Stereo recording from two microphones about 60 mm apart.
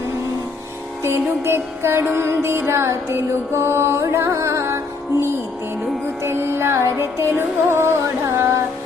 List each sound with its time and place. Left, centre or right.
1.0 s music: right
6.2 s music: right